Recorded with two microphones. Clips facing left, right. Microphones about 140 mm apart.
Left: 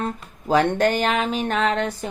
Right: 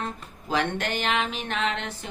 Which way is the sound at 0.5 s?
40° left (ahead or behind).